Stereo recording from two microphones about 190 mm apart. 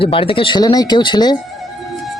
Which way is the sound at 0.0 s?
30° left (ahead or behind).